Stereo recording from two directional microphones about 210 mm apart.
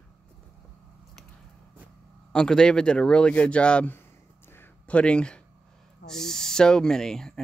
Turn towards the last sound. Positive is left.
turn(degrees=0)  # may be behind; listen again after turning